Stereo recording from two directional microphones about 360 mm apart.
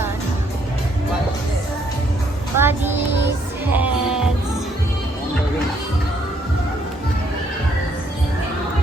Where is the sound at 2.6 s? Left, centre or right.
Centre.